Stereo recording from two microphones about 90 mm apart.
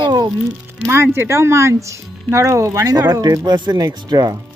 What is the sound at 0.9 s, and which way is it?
Speech, 25° right (ahead or behind).